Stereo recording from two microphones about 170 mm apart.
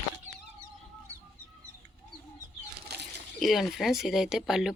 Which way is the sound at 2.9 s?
70° right (ahead or behind).